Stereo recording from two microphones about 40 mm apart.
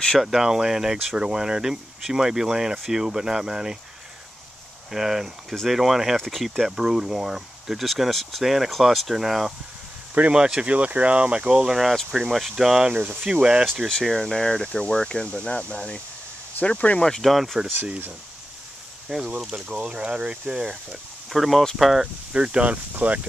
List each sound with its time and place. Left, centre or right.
0.2 s speech: centre
4.9 s speech: centre
6.3 s speech: centre
10.3 s speech: right
11.5 s speech: centre
13.8 s speech: centre
15.0 s speech: left
17.2 s speech: centre
19.1 s speech: centre
19.5 s speech: right
20.9 s speech: centre
22.3 s speech: right
22.9 s speech: right